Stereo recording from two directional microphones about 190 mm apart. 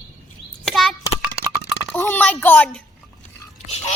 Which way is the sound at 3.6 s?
35° left (ahead or behind).